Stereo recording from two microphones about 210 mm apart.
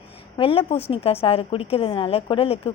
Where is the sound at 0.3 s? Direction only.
25° left (ahead or behind).